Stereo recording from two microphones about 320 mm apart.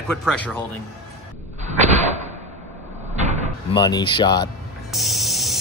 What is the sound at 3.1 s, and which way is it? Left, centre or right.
Door, right.